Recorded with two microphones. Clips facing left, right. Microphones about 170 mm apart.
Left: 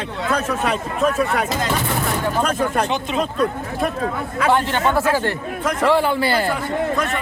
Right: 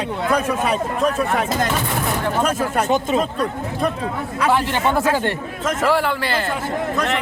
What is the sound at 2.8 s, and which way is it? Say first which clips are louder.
Speech: right 5 dB; 45° right (ahead or behind).